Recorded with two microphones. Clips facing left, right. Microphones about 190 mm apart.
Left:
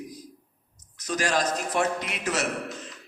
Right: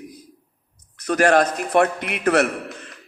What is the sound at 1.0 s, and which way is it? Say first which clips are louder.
A man's voice: right 9 dB; 60° right (ahead or behind).